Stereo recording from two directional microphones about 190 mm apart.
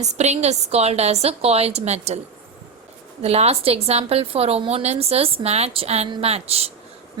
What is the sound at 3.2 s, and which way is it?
Speech, 35° right (ahead or behind).